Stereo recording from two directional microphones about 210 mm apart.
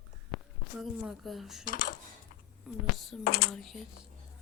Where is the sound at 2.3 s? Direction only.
40° left (ahead or behind).